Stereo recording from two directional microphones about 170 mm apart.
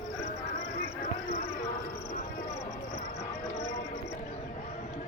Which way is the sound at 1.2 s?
40° left (ahead or behind).